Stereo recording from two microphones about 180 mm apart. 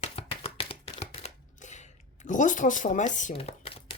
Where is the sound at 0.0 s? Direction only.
35° left (ahead or behind).